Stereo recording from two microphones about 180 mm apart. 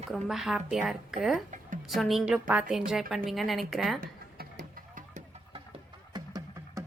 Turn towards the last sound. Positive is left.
turn(degrees=-20)  # may be behind; listen again after turning